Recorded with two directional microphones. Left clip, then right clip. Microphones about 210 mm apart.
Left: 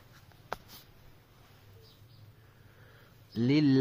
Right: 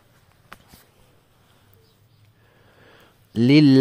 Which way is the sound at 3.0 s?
45° right (ahead or behind).